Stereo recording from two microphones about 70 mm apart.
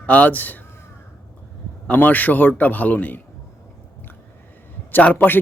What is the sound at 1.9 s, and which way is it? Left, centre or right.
Speech, left.